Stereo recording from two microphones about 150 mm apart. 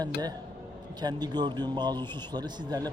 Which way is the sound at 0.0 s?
25° right (ahead or behind).